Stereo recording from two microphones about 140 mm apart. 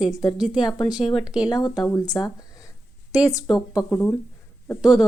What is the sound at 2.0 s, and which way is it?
Speech, 25° left (ahead or behind).